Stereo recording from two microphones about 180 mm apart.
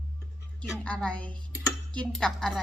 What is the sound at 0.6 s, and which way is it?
A woman's voice, 5° left (ahead or behind).